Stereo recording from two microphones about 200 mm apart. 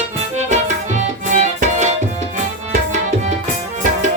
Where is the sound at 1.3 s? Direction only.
40° right (ahead or behind).